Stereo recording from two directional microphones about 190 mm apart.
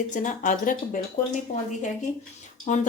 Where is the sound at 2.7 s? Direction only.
40° left (ahead or behind).